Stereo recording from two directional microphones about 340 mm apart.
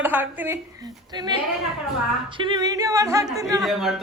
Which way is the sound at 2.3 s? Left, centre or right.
Centre.